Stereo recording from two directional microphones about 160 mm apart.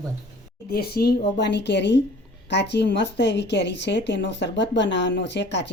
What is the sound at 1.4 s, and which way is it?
A woman's voice, 90° left.